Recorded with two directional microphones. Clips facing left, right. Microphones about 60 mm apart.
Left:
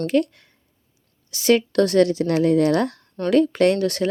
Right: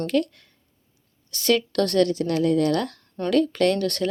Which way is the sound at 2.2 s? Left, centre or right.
Left.